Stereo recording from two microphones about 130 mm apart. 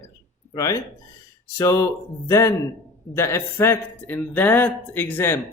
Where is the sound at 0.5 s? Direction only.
25° left (ahead or behind).